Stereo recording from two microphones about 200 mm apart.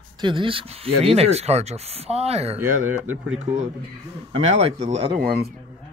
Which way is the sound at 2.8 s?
85° right.